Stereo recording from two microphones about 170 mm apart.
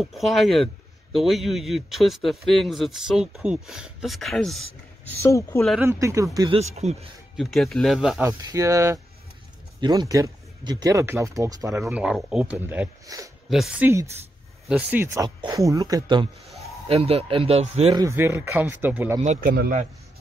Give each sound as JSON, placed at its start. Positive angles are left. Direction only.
{"t": 0.0, "sound": "speech", "side_deg": 0}
{"t": 5.2, "sound": "speech", "side_deg": 15}
{"t": 5.8, "sound": "speech", "side_deg": -15}
{"t": 6.5, "sound": "speech", "side_deg": -40}
{"t": 7.3, "sound": "speech", "side_deg": 0}
{"t": 8.2, "sound": "speech", "side_deg": -20}
{"t": 12.0, "sound": "speech", "side_deg": -5}
{"t": 13.0, "sound": "speech", "side_deg": -20}
{"t": 13.5, "sound": "speech", "side_deg": -5}
{"t": 16.4, "sound": "a sound", "side_deg": 0}
{"t": 16.8, "sound": "speech", "side_deg": -35}
{"t": 17.9, "sound": "speech", "side_deg": -15}
{"t": 19.2, "sound": "a man's voice", "side_deg": -45}